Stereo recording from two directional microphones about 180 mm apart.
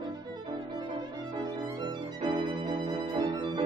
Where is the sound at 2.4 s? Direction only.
25° right (ahead or behind).